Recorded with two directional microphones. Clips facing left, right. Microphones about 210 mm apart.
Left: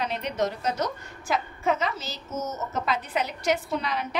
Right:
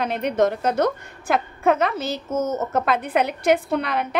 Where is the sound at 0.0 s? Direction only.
55° right (ahead or behind).